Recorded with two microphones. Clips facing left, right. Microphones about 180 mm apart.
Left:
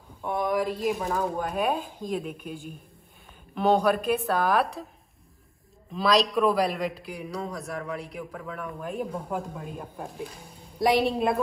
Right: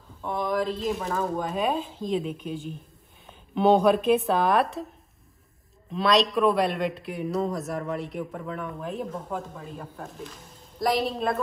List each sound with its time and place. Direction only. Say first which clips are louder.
0.2 s speech: left 1 dB; 5° left (ahead or behind)
0.9 s a man's voice: even; centre (ahead or behind)
3.5 s a man's voice: right 3 dB; centre (ahead or behind)
5.9 s a man's voice: right 1 dB; centre (ahead or behind)